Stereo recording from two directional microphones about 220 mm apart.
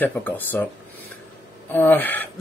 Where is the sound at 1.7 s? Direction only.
10° left (ahead or behind).